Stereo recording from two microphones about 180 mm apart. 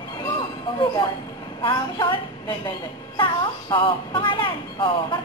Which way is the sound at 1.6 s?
25° left (ahead or behind).